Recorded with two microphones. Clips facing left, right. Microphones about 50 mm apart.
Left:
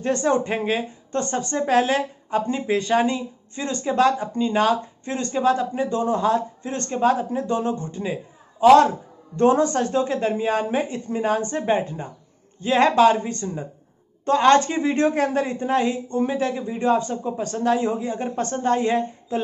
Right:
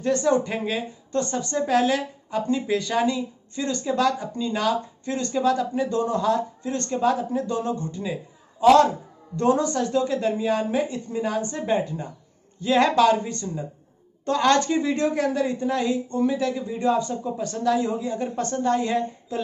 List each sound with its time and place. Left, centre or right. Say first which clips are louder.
0.0 s a woman's voice: even; left